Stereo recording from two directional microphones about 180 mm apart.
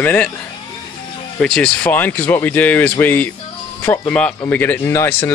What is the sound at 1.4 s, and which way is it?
Speech, 5° left (ahead or behind).